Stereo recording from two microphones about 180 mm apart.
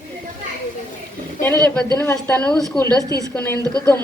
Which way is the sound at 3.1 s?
20° right (ahead or behind).